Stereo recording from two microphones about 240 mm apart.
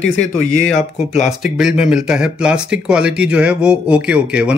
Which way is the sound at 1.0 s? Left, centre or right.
Left.